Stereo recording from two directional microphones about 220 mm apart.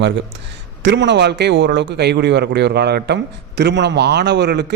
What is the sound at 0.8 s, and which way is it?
A man's voice, 55° right (ahead or behind).